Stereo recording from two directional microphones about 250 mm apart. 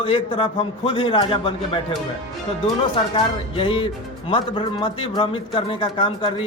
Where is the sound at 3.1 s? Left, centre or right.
Left.